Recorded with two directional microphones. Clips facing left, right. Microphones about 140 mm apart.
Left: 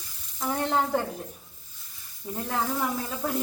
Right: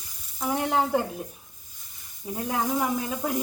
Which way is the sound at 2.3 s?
10° right (ahead or behind).